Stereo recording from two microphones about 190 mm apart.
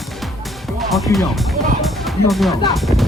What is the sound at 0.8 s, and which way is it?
Music, centre (ahead or behind).